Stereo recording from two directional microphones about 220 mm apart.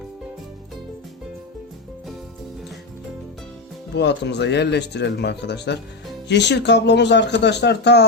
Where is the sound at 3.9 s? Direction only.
50° left (ahead or behind).